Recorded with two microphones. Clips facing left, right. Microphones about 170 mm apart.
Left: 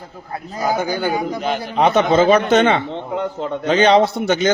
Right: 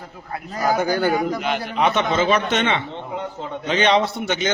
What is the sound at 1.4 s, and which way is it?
A man's voice, 40° left (ahead or behind).